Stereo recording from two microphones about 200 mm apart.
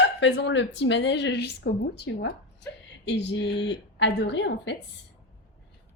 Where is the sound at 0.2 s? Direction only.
65° left (ahead or behind).